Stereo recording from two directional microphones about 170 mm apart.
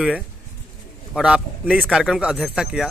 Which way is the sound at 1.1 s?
5° right (ahead or behind).